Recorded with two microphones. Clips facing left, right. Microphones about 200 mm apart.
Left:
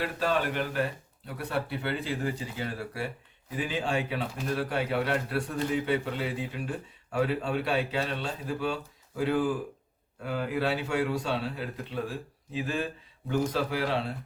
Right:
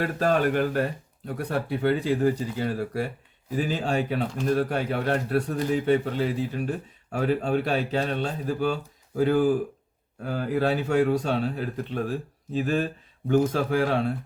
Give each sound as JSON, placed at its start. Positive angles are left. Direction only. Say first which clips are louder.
{"t": 0.0, "sound": "a man's voice", "louder": "right 6 dB", "side_deg": -45}